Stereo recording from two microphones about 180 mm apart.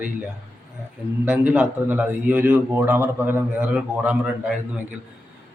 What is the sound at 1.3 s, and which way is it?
A man's voice, 5° right (ahead or behind).